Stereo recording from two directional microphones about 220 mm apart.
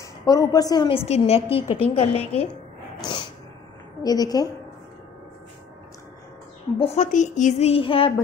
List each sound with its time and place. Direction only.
0.0 s a woman's voice: 15° left (ahead or behind)
3.0 s snort: 20° left (ahead or behind)
4.0 s a woman's voice: 15° left (ahead or behind)
6.8 s a woman's voice: 35° left (ahead or behind)